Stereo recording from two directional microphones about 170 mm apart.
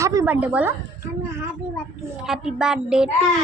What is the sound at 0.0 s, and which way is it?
Speech, 15° right (ahead or behind).